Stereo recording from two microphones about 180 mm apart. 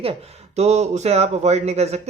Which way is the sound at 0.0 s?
35° right (ahead or behind).